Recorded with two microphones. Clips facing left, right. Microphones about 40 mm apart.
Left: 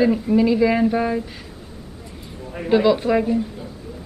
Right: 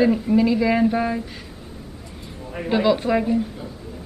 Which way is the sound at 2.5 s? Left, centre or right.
Centre.